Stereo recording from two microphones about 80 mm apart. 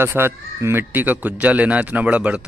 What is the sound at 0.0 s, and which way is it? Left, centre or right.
Speech, right.